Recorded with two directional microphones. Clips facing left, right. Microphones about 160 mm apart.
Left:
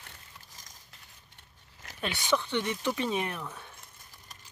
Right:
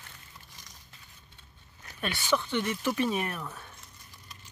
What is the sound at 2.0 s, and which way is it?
Speech, 20° left (ahead or behind).